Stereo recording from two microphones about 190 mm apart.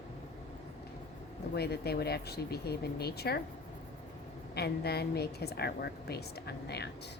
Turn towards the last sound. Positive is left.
turn(degrees=60)  # may be behind; listen again after turning